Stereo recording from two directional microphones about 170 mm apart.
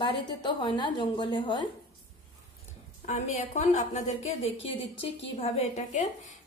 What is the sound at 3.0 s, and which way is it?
A woman's voice, 45° left (ahead or behind).